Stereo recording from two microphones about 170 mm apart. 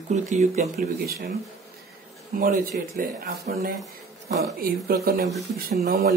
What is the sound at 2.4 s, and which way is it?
Speech, 55° right (ahead or behind).